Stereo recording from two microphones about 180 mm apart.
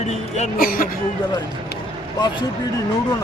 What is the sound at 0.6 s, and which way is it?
Speech, 50° left (ahead or behind).